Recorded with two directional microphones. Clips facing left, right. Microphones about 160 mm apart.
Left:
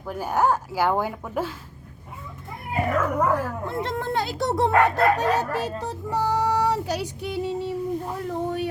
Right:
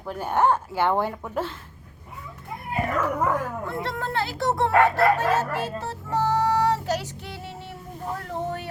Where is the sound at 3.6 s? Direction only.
20° left (ahead or behind).